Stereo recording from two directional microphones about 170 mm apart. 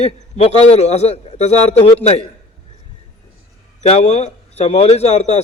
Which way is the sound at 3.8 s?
40° left (ahead or behind).